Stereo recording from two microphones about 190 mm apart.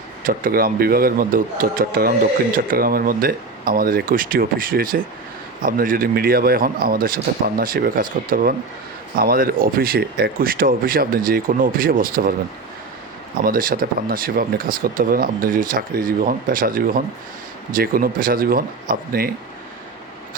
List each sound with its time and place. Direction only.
0.3 s speech: 50° right (ahead or behind)
13.4 s speech: 50° right (ahead or behind)